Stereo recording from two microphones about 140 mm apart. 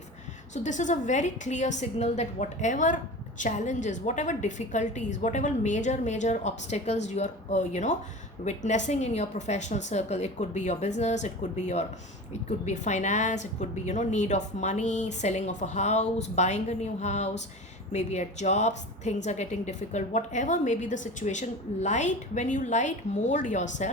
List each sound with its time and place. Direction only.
0.5 s a woman's voice: 60° left (ahead or behind)